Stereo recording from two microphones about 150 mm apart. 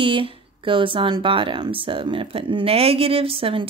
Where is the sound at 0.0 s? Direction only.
35° right (ahead or behind).